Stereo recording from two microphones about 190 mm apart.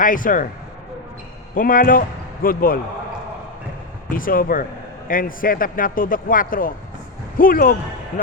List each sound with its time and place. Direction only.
0.0 s a man's voice: 45° left (ahead or behind)
1.5 s speech: 45° left (ahead or behind)
4.1 s a man's voice: 45° left (ahead or behind)